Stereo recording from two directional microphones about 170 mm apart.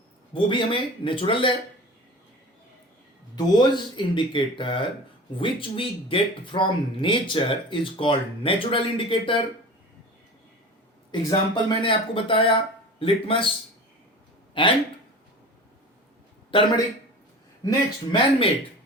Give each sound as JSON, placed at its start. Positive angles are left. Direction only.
{"t": 0.3, "sound": "speech", "side_deg": 30}
{"t": 3.3, "sound": "speech", "side_deg": 25}
{"t": 11.1, "sound": "speech", "side_deg": 25}
{"t": 14.6, "sound": "speech", "side_deg": 30}
{"t": 16.5, "sound": "a man's voice", "side_deg": 30}